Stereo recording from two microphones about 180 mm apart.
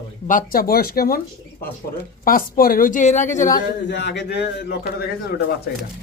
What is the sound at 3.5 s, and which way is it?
Speech, 70° left (ahead or behind).